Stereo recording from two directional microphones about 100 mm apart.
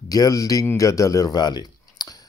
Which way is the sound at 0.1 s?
35° left (ahead or behind).